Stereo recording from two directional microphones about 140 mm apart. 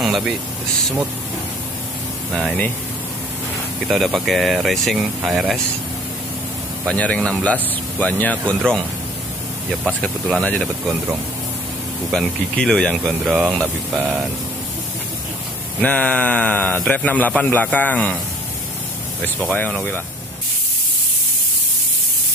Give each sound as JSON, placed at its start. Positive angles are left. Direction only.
{"t": 0.0, "sound": "speech", "side_deg": 0}
{"t": 2.3, "sound": "a man's voice", "side_deg": 5}
{"t": 3.8, "sound": "speech", "side_deg": 0}
{"t": 6.9, "sound": "a man's voice", "side_deg": 5}
{"t": 12.1, "sound": "speech", "side_deg": 5}
{"t": 15.8, "sound": "a man's voice", "side_deg": 5}
{"t": 19.5, "sound": "a man's voice", "side_deg": 10}